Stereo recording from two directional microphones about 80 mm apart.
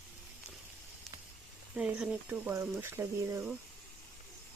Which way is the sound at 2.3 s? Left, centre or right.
Right.